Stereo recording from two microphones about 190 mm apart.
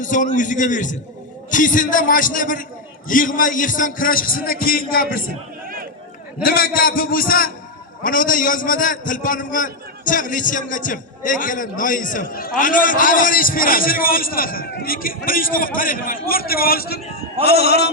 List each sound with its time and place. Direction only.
0.0 s a man's voice: 40° left (ahead or behind)
6.4 s a man's voice: 50° left (ahead or behind)